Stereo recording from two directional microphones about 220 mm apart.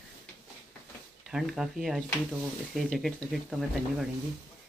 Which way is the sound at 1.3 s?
Centre (ahead or behind).